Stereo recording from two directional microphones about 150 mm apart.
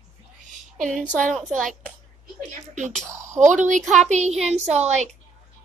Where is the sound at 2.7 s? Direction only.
55° right (ahead or behind).